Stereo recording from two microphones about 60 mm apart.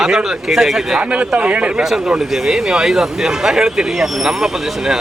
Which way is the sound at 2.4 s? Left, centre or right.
Centre.